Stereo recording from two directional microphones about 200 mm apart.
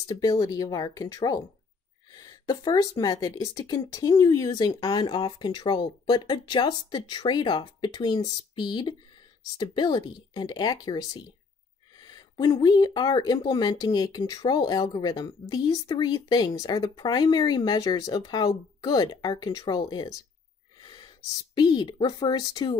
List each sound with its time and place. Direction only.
0.0 s speech: 20° left (ahead or behind)
20.8 s a sound: 20° left (ahead or behind)
21.5 s speech: 20° left (ahead or behind)